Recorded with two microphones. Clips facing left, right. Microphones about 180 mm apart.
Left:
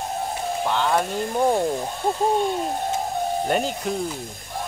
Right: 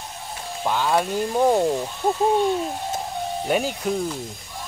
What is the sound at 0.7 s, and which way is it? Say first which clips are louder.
Speech: right 1 dB; 10° right (ahead or behind).